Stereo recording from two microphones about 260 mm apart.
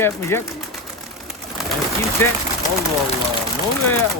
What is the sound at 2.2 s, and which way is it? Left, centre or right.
Speech, centre.